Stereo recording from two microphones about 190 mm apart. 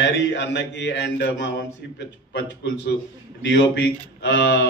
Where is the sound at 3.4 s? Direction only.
65° left (ahead or behind).